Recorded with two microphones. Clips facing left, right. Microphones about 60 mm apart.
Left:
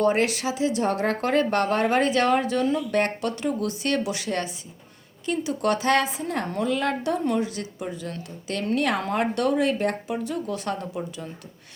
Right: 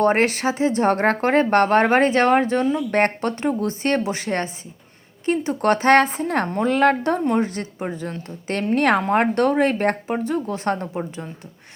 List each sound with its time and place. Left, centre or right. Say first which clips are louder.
0.0 s a woman's voice: right 4 dB; right
9.0 s speech: right 6 dB; right